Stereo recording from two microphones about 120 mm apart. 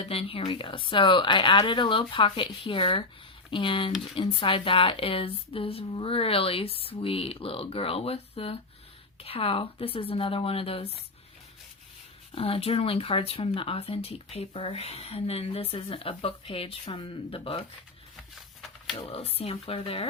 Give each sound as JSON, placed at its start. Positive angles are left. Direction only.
{"t": 0.0, "sound": "speech", "side_deg": 55}
{"t": 12.3, "sound": "speech", "side_deg": 55}
{"t": 18.9, "sound": "speech", "side_deg": 55}